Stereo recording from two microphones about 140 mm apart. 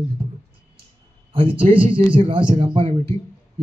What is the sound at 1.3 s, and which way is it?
A man's voice, 40° right (ahead or behind).